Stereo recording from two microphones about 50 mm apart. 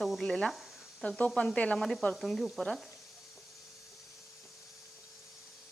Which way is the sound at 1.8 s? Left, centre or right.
Centre.